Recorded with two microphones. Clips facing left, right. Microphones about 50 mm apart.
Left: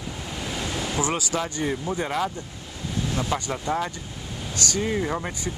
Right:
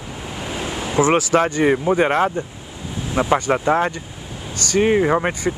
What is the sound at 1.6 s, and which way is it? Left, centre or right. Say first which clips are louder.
Speech: right 11 dB; right.